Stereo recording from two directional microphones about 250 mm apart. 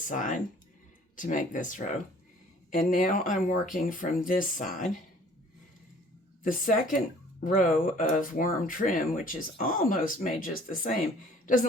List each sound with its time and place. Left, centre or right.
0.0 s speech: left
6.4 s speech: left